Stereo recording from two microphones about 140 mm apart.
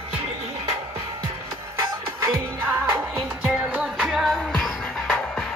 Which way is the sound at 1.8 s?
15° right (ahead or behind).